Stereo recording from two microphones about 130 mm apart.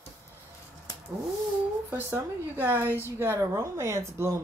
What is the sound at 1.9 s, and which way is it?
Speech, 20° right (ahead or behind).